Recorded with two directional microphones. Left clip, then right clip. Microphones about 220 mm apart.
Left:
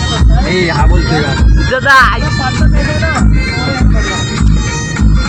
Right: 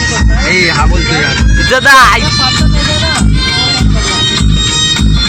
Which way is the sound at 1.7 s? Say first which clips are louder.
Right 3 dB; 15° right (ahead or behind).